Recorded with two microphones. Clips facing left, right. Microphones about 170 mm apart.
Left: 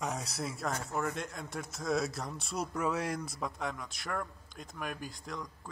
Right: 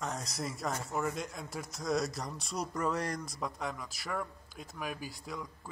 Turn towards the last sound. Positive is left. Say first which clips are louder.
# even
turn(degrees=-5)  # may be behind; listen again after turning